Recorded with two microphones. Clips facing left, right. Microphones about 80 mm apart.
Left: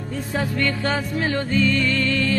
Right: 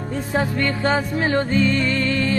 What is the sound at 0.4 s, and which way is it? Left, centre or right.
Music, right.